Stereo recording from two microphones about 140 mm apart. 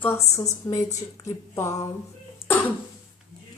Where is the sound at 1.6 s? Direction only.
20° left (ahead or behind).